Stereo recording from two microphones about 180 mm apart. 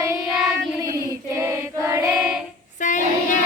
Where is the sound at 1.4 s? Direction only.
15° right (ahead or behind).